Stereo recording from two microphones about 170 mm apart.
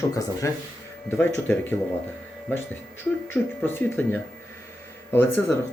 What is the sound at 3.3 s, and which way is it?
Speech, 10° left (ahead or behind).